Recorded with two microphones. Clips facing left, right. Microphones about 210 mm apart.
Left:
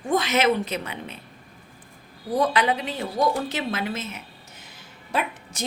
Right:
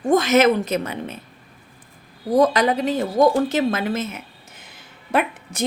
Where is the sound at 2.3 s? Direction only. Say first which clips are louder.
Right 5 dB; 40° right (ahead or behind).